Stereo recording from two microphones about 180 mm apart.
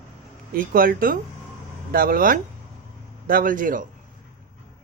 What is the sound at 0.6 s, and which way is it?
Speech, 50° right (ahead or behind).